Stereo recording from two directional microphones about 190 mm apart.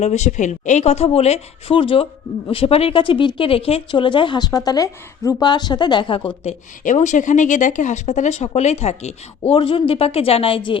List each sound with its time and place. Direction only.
0.0 s speech: 35° left (ahead or behind)
6.4 s speech: 40° left (ahead or behind)